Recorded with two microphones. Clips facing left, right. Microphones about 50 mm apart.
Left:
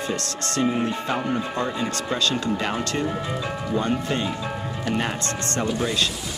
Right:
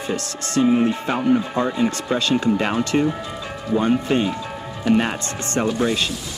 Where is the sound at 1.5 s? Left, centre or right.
Centre.